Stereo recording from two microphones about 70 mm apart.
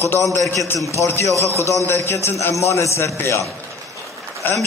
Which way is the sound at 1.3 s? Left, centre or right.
Right.